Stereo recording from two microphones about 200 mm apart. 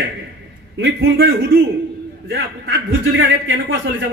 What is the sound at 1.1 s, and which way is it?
Speech, 50° right (ahead or behind).